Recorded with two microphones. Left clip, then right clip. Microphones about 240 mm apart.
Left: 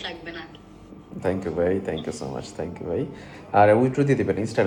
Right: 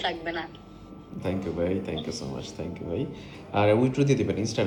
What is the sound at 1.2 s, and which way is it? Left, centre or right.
Speech, left.